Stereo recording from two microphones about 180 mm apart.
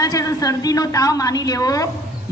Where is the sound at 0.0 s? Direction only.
20° left (ahead or behind).